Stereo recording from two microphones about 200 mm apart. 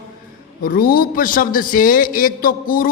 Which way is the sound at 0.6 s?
45° left (ahead or behind).